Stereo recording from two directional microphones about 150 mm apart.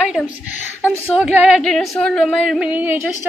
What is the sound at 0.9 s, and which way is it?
Female singing, 10° right (ahead or behind).